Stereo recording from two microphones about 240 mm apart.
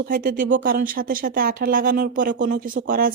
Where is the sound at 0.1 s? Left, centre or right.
Right.